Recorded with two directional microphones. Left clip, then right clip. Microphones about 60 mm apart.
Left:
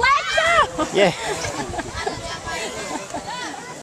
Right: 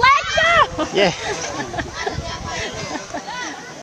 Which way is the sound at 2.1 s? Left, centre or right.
Centre.